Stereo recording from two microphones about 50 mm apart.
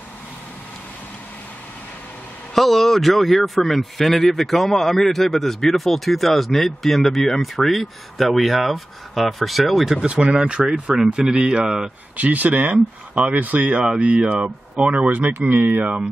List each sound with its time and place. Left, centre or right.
2.5 s speech: centre
9.9 s speech: right
12.2 s speech: right